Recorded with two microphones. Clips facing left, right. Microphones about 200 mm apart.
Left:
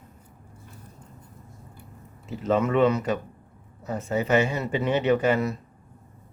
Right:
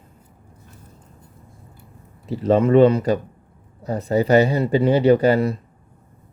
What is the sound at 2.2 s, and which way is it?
Speech, 35° right (ahead or behind).